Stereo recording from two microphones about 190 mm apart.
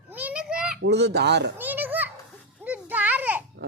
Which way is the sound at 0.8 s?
60° right (ahead or behind).